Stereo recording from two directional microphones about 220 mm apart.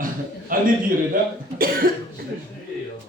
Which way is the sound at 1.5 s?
40° right (ahead or behind).